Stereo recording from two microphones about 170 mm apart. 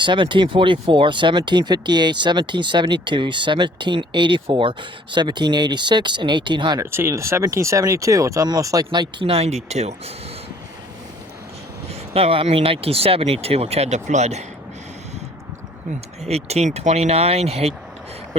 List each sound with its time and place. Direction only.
0.0 s speech: 30° right (ahead or behind)
6.9 s speech: 15° right (ahead or behind); by 9.9 s 40° right (ahead or behind)
12.1 s speech: 35° right (ahead or behind)
16.2 s speech: 40° right (ahead or behind)